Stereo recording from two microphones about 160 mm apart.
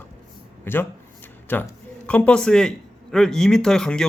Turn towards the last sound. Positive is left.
turn(degrees=5)  # may be behind; listen again after turning